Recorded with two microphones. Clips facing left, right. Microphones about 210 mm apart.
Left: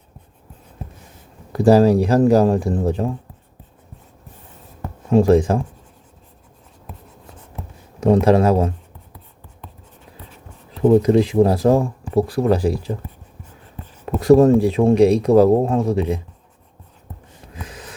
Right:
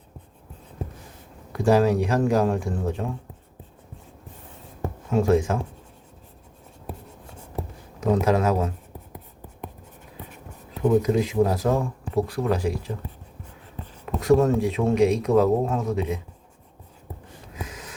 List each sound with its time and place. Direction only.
1.5 s speech: 35° left (ahead or behind)
5.1 s speech: 35° left (ahead or behind)
8.0 s speech: 35° left (ahead or behind)
11.0 s speech: 30° left (ahead or behind)
14.2 s speech: 35° left (ahead or behind)